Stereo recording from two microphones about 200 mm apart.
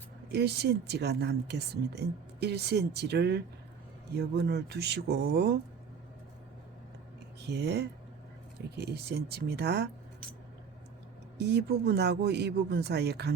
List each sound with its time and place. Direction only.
0.3 s speech: 55° right (ahead or behind)
7.4 s speech: 55° right (ahead or behind)
11.3 s speech: 55° right (ahead or behind)